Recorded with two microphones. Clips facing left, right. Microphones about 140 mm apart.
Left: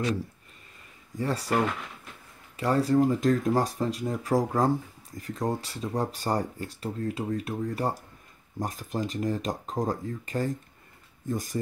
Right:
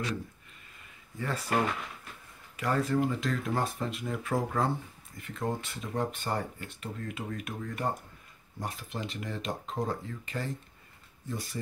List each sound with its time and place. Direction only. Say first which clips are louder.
1.1 s speech: left 5 dB; 35° left (ahead or behind)
2.5 s speech: left 5 dB; 30° left (ahead or behind)
8.5 s speech: left 6 dB; 45° left (ahead or behind)